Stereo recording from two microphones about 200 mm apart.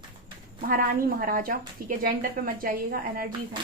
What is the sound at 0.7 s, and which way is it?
A woman's voice, 45° right (ahead or behind).